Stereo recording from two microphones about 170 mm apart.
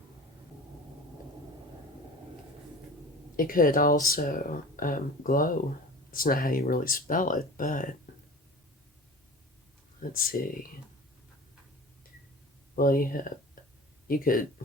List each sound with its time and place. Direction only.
3.3 s speech: 55° left (ahead or behind)
10.0 s speech: 55° left (ahead or behind)
12.7 s speech: 55° left (ahead or behind)